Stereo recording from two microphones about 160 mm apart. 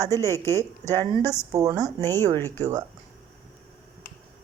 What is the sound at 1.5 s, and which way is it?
Speech, 20° right (ahead or behind).